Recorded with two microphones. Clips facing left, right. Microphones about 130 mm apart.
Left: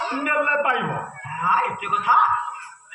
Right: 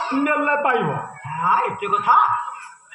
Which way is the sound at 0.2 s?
50° right (ahead or behind).